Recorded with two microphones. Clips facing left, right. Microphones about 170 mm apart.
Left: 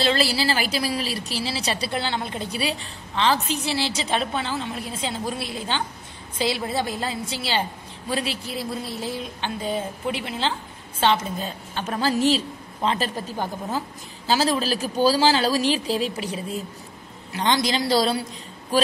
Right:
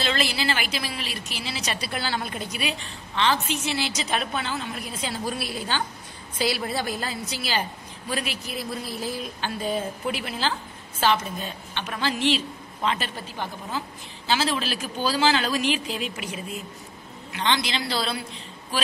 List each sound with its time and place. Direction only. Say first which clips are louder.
0.0 s a woman's voice: left 4 dB; 30° left (ahead or behind)